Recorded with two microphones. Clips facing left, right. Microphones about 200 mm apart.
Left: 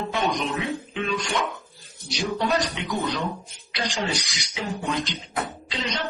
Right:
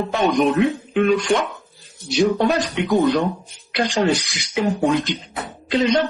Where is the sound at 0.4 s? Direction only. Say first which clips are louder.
Right 10 dB; 55° right (ahead or behind).